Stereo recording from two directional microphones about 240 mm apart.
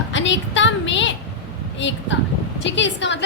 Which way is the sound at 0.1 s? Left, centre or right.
Left.